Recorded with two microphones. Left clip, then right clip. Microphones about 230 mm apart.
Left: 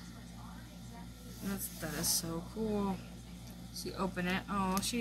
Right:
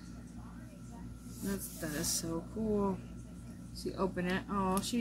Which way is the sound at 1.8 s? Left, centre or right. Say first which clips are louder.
Left 1 dB; left.